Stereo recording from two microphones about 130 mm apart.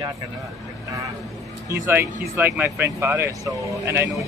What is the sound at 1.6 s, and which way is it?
Speech, 20° right (ahead or behind).